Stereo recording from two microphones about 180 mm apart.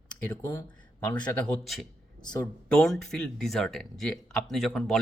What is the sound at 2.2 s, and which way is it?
Speech, 25° left (ahead or behind).